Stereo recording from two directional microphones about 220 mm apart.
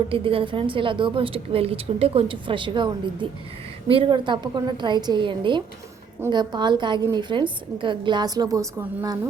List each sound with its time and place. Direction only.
0.1 s a woman's voice: 25° right (ahead or behind)